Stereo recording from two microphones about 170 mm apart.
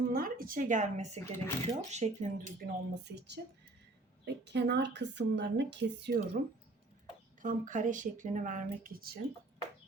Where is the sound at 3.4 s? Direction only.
65° right (ahead or behind).